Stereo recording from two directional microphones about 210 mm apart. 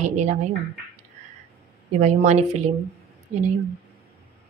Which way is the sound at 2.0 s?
35° right (ahead or behind).